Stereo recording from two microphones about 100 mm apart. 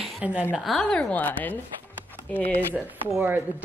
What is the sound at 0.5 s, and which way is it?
Speech, centre (ahead or behind).